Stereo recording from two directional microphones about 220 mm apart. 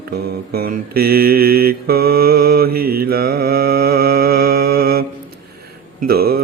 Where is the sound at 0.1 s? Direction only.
45° right (ahead or behind).